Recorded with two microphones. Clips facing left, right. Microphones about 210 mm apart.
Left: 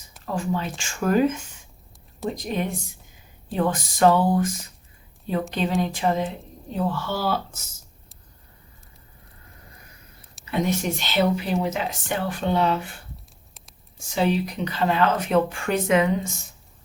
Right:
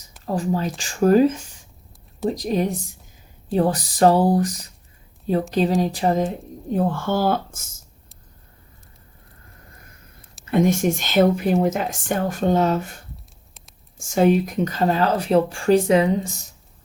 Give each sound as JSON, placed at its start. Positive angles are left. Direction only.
{"t": 0.3, "sound": "speech", "side_deg": -35}
{"t": 10.4, "sound": "speech", "side_deg": -50}
{"t": 14.0, "sound": "speech", "side_deg": -45}